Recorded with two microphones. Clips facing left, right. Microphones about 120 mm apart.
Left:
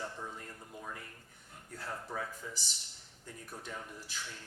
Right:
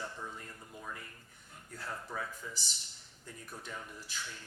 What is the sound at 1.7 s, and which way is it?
Speech, 35° left (ahead or behind).